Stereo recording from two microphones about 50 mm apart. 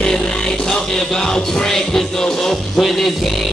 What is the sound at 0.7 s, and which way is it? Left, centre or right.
Music, centre.